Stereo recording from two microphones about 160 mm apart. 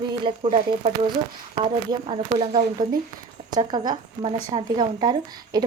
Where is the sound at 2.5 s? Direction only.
55° right (ahead or behind).